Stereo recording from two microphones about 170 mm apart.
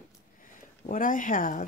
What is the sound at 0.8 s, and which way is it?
Speech, 50° left (ahead or behind).